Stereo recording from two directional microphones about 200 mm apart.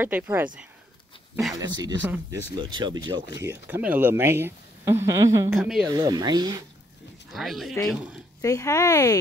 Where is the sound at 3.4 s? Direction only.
10° right (ahead or behind).